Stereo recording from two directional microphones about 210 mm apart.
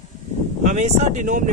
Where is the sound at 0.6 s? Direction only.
35° right (ahead or behind).